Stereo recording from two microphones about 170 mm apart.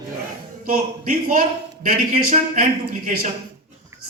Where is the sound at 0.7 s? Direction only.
55° right (ahead or behind).